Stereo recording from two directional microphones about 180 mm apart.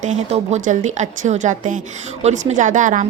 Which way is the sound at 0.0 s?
40° right (ahead or behind).